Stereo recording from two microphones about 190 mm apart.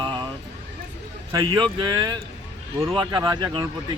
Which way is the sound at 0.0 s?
25° right (ahead or behind).